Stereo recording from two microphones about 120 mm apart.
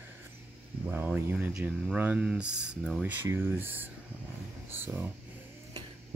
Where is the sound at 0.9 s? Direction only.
15° right (ahead or behind).